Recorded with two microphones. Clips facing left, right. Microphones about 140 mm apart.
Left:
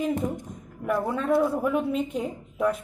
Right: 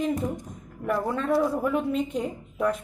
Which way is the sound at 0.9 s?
5° left (ahead or behind).